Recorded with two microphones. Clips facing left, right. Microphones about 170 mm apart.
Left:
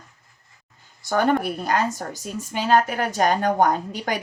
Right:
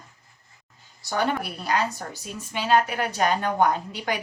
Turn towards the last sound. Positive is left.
turn(degrees=45)  # may be behind; listen again after turning